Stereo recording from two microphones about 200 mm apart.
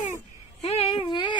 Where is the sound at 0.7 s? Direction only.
25° left (ahead or behind).